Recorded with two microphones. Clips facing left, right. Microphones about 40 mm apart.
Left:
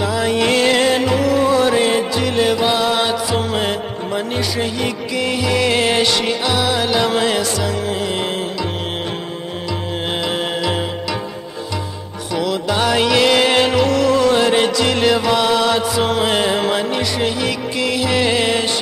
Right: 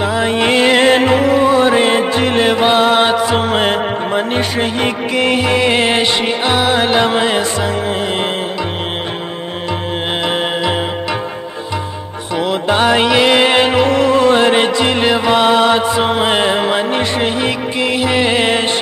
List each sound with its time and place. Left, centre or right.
0.0 s music: right
12.4 s music: right